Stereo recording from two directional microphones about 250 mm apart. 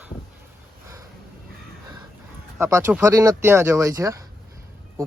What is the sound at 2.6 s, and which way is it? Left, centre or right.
Speech, centre.